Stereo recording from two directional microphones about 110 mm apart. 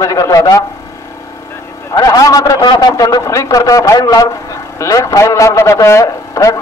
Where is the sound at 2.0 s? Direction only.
30° left (ahead or behind).